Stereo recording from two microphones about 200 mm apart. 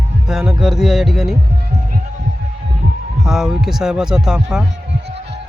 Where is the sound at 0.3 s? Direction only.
Centre (ahead or behind).